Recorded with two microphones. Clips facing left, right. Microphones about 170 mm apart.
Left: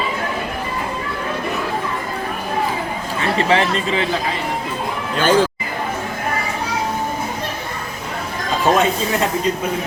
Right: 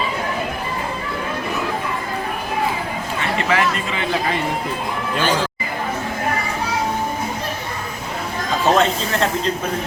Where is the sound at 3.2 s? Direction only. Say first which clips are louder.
Left 3 dB; 30° left (ahead or behind).